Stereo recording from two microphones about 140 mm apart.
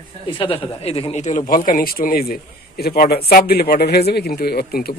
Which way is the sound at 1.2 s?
60° left (ahead or behind).